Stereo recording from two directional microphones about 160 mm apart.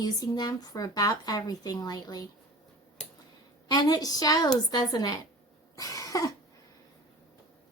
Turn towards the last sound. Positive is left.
turn(degrees=20)  # may be behind; listen again after turning